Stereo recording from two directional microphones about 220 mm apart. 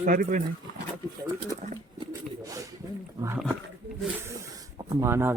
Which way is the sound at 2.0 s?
15° right (ahead or behind).